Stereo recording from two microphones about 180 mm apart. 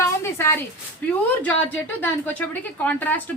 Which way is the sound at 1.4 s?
10° left (ahead or behind).